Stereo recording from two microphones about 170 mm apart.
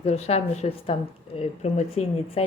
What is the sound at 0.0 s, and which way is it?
Speech, 40° left (ahead or behind).